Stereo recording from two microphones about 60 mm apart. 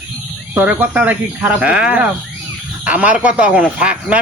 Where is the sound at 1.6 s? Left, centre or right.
Right.